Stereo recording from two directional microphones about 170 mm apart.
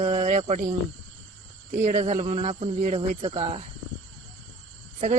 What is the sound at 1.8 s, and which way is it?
Speech, 40° right (ahead or behind).